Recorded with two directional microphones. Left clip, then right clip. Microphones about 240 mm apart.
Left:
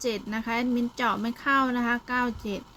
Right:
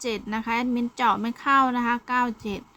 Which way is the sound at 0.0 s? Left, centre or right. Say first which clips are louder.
Right 1 dB; centre.